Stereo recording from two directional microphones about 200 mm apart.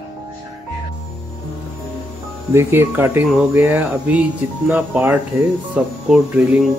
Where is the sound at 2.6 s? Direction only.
10° right (ahead or behind).